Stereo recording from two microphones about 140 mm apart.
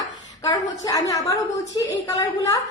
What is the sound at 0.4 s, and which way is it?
A woman's voice, 25° left (ahead or behind).